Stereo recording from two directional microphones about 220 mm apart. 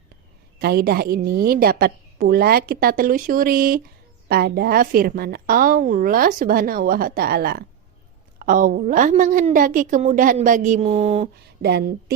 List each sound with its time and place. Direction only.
0.6 s a woman's voice: 45° right (ahead or behind); by 11.3 s 30° right (ahead or behind)
11.3 s speech: 45° right (ahead or behind)